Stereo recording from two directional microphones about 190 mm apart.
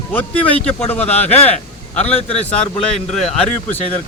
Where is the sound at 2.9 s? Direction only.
Centre (ahead or behind).